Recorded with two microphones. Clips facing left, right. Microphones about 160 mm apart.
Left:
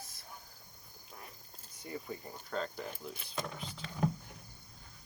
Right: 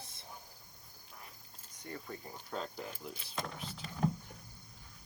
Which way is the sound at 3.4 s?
Centre (ahead or behind).